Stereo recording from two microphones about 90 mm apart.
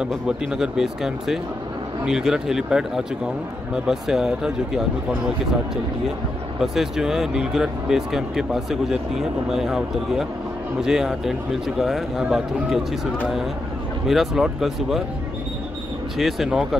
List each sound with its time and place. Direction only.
0.1 s speech: 5° right (ahead or behind)
6.6 s speech: 5° right (ahead or behind)
16.2 s speech: centre (ahead or behind)